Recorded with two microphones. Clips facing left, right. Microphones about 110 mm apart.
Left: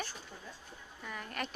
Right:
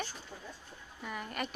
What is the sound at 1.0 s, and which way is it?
Speech, 5° right (ahead or behind).